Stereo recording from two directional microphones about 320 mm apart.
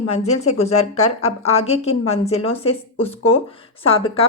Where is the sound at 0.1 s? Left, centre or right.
Centre.